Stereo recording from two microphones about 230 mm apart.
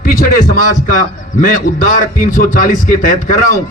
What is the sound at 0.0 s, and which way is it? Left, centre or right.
A man's voice, left.